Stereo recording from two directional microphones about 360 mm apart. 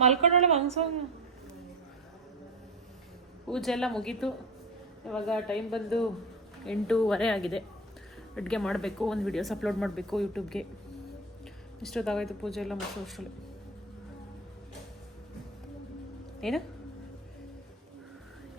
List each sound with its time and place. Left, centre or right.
0.0 s a woman's voice: centre
3.4 s speech: centre
11.8 s speech: centre
16.4 s speech: centre